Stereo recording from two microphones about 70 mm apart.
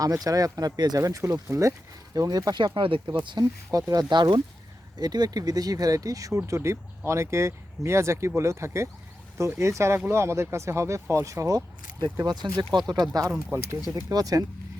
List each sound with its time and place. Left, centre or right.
0.0 s speech: right
1.5 s speech: right
2.1 s speech: right
3.3 s speech: right
4.9 s speech: right
6.4 s speech: right
12.9 s speech: right
13.5 s speech: right
13.9 s speech: right